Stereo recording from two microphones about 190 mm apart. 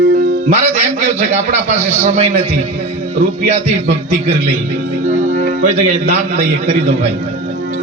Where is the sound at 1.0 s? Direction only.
40° right (ahead or behind).